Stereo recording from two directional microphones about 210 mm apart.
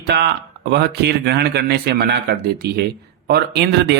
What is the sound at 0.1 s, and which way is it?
Speech, 50° right (ahead or behind).